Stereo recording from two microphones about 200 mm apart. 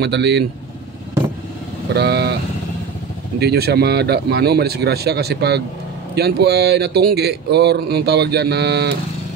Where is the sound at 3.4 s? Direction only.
55° right (ahead or behind).